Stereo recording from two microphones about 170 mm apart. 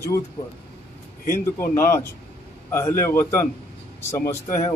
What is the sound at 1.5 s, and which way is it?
A man's voice, 15° left (ahead or behind).